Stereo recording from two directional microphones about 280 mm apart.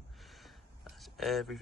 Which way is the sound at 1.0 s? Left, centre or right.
Centre.